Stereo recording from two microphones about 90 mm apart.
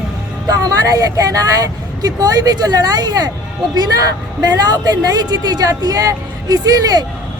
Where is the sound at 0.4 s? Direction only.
45° right (ahead or behind).